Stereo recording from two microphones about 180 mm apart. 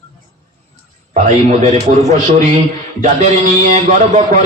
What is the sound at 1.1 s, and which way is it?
A man's voice, 40° right (ahead or behind).